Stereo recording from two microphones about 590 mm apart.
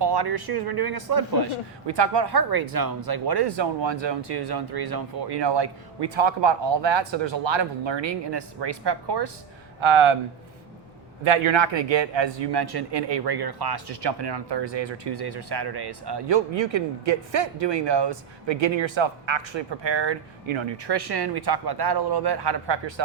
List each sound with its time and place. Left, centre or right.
0.0 s speech: right
9.8 s speech: right
11.2 s speech: right
17.8 s speech: right